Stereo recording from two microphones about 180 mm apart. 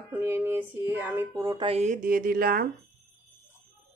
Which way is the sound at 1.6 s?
35° right (ahead or behind).